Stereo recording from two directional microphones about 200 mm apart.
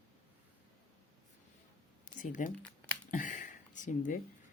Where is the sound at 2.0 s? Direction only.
40° left (ahead or behind).